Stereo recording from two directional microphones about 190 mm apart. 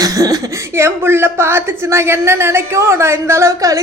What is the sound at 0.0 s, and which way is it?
Speech, 20° right (ahead or behind).